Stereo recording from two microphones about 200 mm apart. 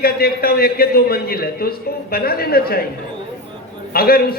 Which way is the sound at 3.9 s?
50° left (ahead or behind).